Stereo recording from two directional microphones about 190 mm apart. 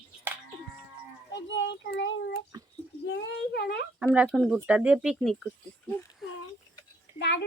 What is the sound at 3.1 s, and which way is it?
Child singing, 65° left (ahead or behind).